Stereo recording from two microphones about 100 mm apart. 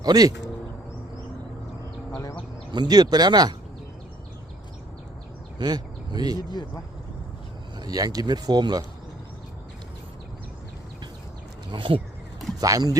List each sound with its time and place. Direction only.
0.0 s speech: 40° right (ahead or behind)
2.7 s speech: 45° right (ahead or behind)
5.5 s speech: 45° right (ahead or behind)
7.8 s speech: 40° right (ahead or behind)
11.7 s speech: 55° right (ahead or behind)
12.5 s speech: 35° right (ahead or behind)